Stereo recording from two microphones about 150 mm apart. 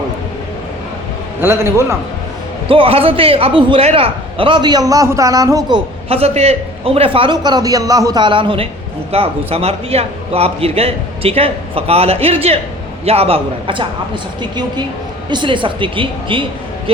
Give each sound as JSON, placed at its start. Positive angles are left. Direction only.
{"t": 1.4, "sound": "a man's voice", "side_deg": -15}
{"t": 2.6, "sound": "a man's voice", "side_deg": -35}
{"t": 5.7, "sound": "a man's voice", "side_deg": -40}
{"t": 15.3, "sound": "a man's voice", "side_deg": -30}